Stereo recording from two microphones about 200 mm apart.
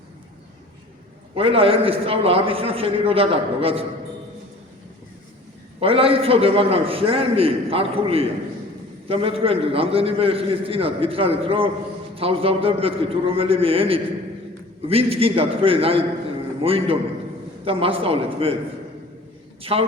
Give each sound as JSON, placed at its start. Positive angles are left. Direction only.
{"t": 1.4, "sound": "a man's voice", "side_deg": -25}
{"t": 5.8, "sound": "a man's voice", "side_deg": -30}